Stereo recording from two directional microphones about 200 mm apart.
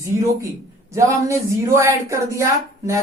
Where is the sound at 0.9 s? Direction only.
15° right (ahead or behind).